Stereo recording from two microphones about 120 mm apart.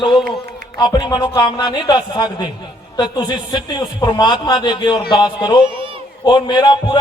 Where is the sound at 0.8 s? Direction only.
35° left (ahead or behind).